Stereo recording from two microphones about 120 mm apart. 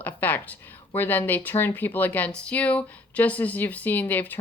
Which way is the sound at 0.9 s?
15° left (ahead or behind).